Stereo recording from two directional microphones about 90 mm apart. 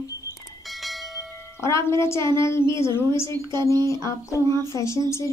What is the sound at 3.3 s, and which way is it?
Speech, 50° right (ahead or behind).